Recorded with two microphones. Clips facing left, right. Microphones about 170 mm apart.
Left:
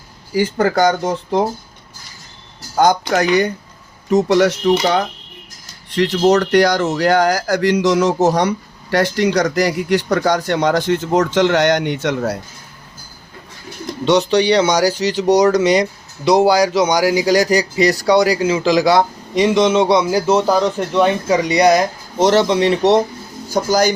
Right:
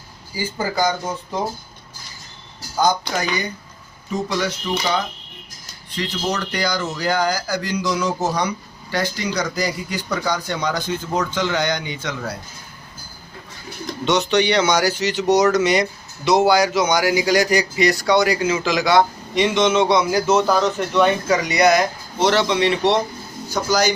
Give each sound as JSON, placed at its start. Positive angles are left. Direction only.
{"t": 0.3, "sound": "speech", "side_deg": 70}
{"t": 2.7, "sound": "speech", "side_deg": 75}
{"t": 5.9, "sound": "speech", "side_deg": 75}
{"t": 14.0, "sound": "a man's voice", "side_deg": 30}